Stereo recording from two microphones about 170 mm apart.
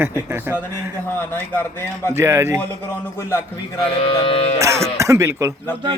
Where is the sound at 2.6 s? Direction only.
15° left (ahead or behind).